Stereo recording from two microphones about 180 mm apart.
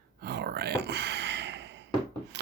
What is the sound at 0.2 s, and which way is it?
Sigh, 65° right (ahead or behind).